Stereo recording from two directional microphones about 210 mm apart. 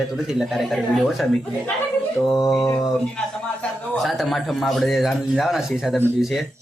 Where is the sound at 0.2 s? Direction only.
Centre (ahead or behind).